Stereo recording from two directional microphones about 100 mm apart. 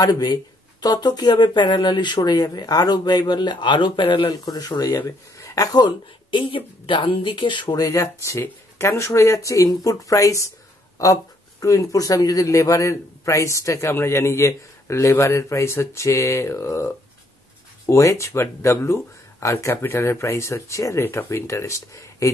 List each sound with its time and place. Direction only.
0.0 s speech: 40° left (ahead or behind)
4.3 s a man's voice: 40° left (ahead or behind)
5.9 s speech: 60° left (ahead or behind)
7.8 s a man's voice: 30° left (ahead or behind)
11.6 s a man's voice: 30° left (ahead or behind)